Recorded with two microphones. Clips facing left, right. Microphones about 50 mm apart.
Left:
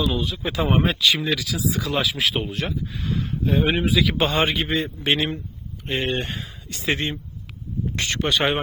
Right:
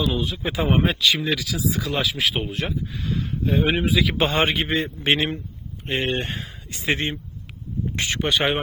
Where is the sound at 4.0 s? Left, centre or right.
Centre.